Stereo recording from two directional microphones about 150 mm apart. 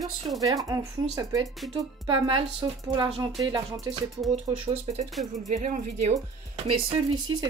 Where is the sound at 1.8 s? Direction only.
35° right (ahead or behind).